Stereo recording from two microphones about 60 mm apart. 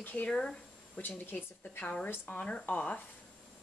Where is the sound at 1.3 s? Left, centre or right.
Left.